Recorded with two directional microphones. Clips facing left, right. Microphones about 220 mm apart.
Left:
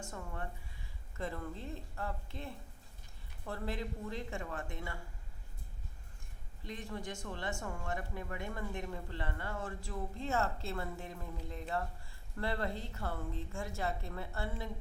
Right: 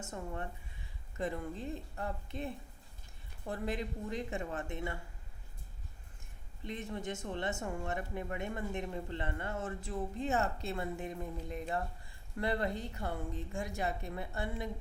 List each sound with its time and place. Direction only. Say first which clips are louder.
1.1 s speech: right 3 dB; 20° right (ahead or behind)
6.7 s a woman's voice: right 3 dB; 20° right (ahead or behind)